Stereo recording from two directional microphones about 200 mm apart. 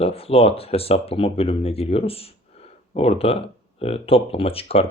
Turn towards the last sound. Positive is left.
turn(degrees=30)  # may be behind; listen again after turning